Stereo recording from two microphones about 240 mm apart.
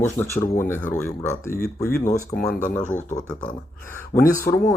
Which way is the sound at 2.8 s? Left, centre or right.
Left.